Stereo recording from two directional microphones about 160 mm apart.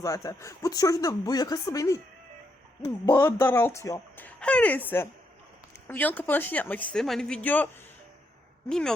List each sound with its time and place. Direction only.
0.0 s speech: 20° left (ahead or behind)